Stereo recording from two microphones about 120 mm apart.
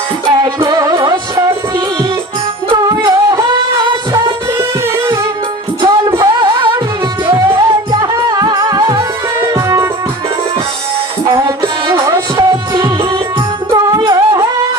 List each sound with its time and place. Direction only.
0.6 s music: 35° right (ahead or behind)
2.7 s music: 35° right (ahead or behind)
5.8 s music: 35° right (ahead or behind)
7.5 s music: 40° right (ahead or behind); by 9.9 s 25° right (ahead or behind)
11.3 s music: 25° right (ahead or behind)